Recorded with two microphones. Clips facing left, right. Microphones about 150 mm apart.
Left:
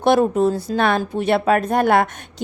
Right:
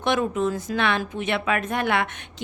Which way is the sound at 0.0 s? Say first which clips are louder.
Left 7 dB; 35° left (ahead or behind).